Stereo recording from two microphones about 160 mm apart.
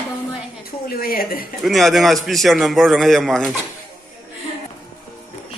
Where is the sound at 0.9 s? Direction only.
65° left (ahead or behind).